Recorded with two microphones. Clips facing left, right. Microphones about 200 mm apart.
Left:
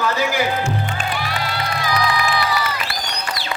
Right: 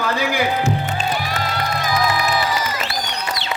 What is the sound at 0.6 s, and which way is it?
Music, 40° right (ahead or behind).